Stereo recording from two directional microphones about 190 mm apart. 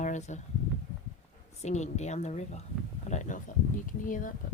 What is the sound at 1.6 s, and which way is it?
Speech, 35° left (ahead or behind).